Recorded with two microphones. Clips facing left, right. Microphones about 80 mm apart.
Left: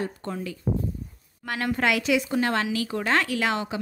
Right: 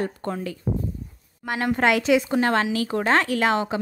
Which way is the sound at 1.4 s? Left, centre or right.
Right.